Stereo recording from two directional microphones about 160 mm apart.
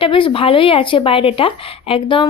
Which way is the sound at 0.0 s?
35° left (ahead or behind).